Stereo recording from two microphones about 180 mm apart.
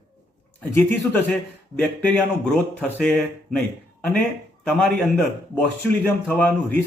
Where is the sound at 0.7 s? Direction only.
10° left (ahead or behind).